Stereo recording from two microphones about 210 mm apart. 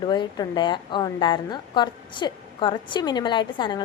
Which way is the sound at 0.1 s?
20° left (ahead or behind).